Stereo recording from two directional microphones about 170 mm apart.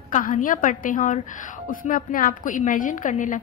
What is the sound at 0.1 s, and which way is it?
A woman's voice, 50° left (ahead or behind).